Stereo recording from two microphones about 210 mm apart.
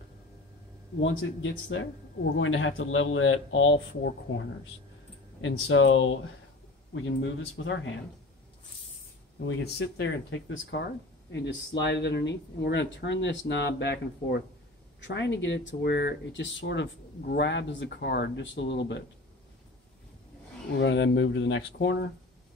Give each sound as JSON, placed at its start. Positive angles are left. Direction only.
{"t": 1.0, "sound": "speech", "side_deg": 65}
{"t": 5.4, "sound": "speech", "side_deg": 70}
{"t": 9.6, "sound": "speech", "side_deg": 55}
{"t": 20.7, "sound": "speech", "side_deg": 60}